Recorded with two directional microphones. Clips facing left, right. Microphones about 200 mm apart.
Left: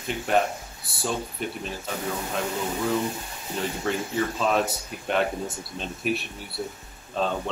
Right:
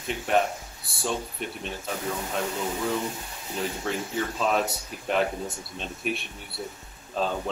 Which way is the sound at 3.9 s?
Centre (ahead or behind).